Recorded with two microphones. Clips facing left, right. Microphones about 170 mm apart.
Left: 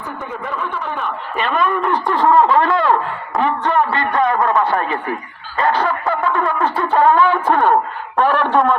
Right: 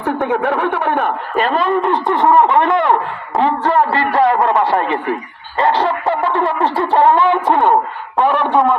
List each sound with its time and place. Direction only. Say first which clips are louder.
0.0 s speech: right 11 dB; 75° right (ahead or behind)
1.4 s a man's voice: right 2 dB; 35° right (ahead or behind)
1.7 s speech: right 3 dB; 20° right (ahead or behind)
3.4 s a man's voice: right 3 dB; 35° right (ahead or behind)
8.2 s a sound: right 1 dB; 15° right (ahead or behind)